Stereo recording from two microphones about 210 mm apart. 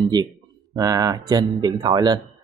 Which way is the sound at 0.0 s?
20° right (ahead or behind).